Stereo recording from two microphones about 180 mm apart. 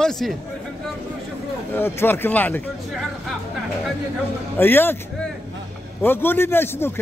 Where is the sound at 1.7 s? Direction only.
10° left (ahead or behind).